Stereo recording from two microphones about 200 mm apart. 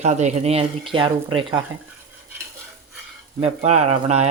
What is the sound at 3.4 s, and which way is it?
Speech, 30° right (ahead or behind).